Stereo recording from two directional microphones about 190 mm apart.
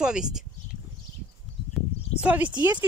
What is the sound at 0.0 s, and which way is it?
Speech, 5° right (ahead or behind).